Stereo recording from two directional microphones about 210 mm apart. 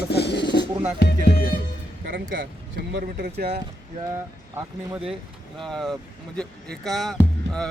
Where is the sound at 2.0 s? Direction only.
40° right (ahead or behind).